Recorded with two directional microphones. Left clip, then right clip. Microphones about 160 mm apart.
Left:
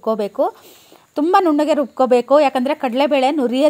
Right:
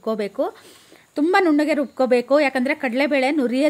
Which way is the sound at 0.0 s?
10° left (ahead or behind).